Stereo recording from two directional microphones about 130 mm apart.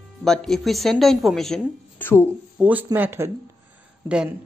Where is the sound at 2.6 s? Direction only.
10° right (ahead or behind).